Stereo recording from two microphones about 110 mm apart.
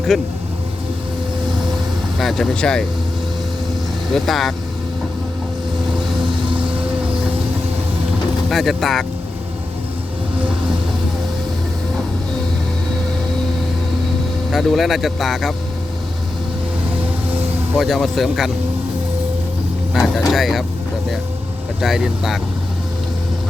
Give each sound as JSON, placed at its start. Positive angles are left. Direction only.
{"t": 0.1, "sound": "speech", "side_deg": 0}
{"t": 2.1, "sound": "speech", "side_deg": 0}
{"t": 4.1, "sound": "speech", "side_deg": 0}
{"t": 8.4, "sound": "speech", "side_deg": 0}
{"t": 14.5, "sound": "speech", "side_deg": 0}
{"t": 17.7, "sound": "speech", "side_deg": 0}
{"t": 19.9, "sound": "speech", "side_deg": 0}
{"t": 21.8, "sound": "speech", "side_deg": -5}